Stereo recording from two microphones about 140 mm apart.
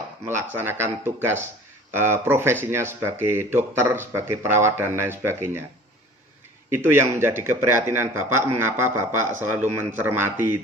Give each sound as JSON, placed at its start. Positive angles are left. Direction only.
{"t": 0.3, "sound": "speech", "side_deg": -15}
{"t": 6.7, "sound": "speech", "side_deg": -15}